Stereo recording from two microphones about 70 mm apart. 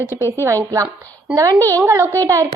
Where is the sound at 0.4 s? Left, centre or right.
Right.